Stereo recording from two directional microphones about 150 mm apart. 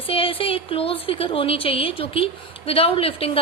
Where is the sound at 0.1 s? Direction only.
40° left (ahead or behind).